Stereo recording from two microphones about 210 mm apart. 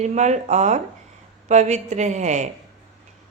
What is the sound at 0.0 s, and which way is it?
Speech, 35° right (ahead or behind).